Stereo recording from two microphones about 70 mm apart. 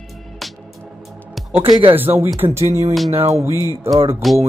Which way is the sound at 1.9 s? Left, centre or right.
Right.